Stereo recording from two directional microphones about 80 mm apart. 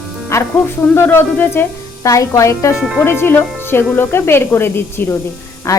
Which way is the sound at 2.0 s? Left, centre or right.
Left.